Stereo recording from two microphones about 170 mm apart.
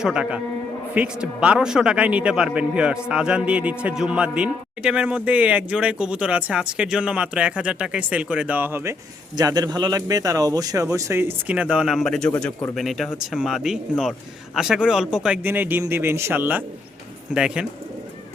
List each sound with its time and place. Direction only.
0.0 s a man's voice: 5° right (ahead or behind)